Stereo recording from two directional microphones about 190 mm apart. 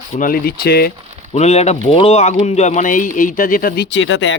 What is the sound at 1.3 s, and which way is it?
Speech, 35° left (ahead or behind).